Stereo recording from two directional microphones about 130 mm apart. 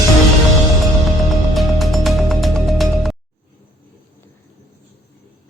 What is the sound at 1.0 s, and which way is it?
Music, centre (ahead or behind).